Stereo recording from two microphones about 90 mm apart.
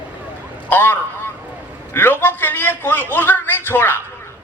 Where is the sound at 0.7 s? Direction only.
20° left (ahead or behind).